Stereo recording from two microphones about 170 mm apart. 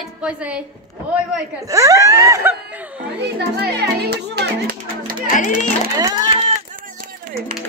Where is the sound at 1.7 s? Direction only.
20° right (ahead or behind).